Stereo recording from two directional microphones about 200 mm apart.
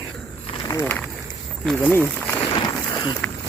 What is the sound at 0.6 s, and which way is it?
Speech, 10° left (ahead or behind).